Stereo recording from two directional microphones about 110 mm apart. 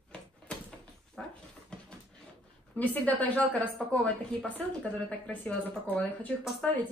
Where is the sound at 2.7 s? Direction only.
15° left (ahead or behind).